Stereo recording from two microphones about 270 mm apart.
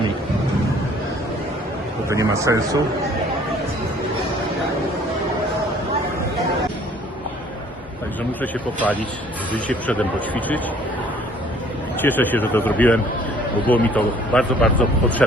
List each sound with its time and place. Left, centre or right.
2.0 s a man's voice: centre
8.4 s a man's voice: centre
12.0 s a man's voice: centre